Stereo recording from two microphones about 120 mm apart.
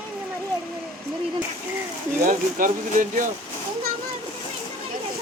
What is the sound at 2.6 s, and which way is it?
Speech, 90° right.